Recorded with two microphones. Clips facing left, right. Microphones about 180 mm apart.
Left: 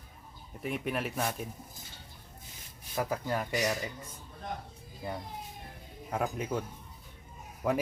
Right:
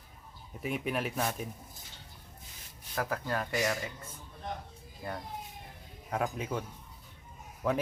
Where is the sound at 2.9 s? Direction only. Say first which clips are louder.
Left 1 dB; 10° left (ahead or behind).